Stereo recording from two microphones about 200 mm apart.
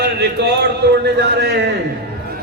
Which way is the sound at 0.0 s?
55° right (ahead or behind).